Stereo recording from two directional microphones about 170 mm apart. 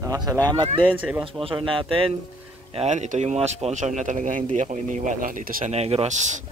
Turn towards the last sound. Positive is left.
turn(degrees=-40)  # may be behind; listen again after turning